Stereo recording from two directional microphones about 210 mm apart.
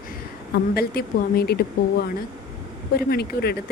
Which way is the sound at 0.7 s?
50° left (ahead or behind).